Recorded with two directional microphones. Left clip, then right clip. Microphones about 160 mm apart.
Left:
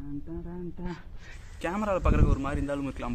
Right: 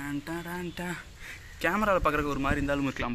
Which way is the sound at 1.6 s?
Centre (ahead or behind).